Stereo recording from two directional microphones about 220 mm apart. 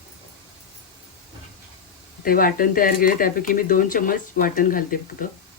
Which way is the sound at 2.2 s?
40° left (ahead or behind).